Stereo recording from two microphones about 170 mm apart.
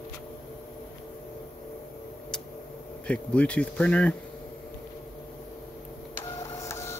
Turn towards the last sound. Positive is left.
turn(degrees=15)  # may be behind; listen again after turning